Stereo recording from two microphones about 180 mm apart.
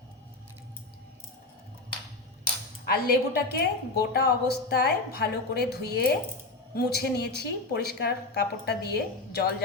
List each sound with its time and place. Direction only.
2.8 s a woman's voice: 60° left (ahead or behind)